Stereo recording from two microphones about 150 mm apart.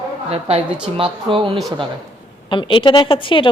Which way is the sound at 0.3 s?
40° right (ahead or behind).